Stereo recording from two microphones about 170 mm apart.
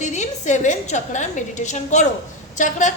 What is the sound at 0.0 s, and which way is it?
A woman's voice, 45° left (ahead or behind).